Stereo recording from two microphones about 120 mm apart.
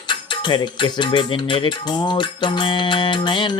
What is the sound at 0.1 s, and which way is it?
Music, 40° left (ahead or behind).